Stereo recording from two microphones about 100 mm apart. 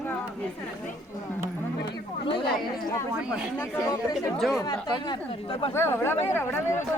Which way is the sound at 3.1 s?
10° right (ahead or behind).